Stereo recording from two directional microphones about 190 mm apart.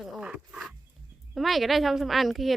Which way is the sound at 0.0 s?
5° right (ahead or behind).